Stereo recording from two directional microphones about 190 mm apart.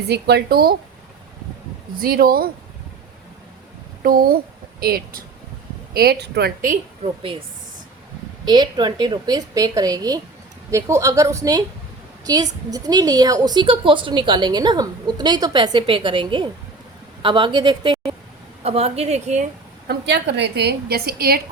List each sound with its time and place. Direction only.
0.1 s a woman's voice: 60° right (ahead or behind)
2.0 s speech: 50° right (ahead or behind)
4.0 s a woman's voice: 50° right (ahead or behind)
7.0 s a woman's voice: 30° right (ahead or behind)
8.4 s a woman's voice: 20° right (ahead or behind); by 19.5 s 35° right (ahead or behind)
19.9 s a woman's voice: 60° right (ahead or behind)